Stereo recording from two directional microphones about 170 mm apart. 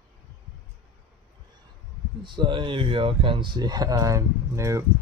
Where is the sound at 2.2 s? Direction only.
30° right (ahead or behind).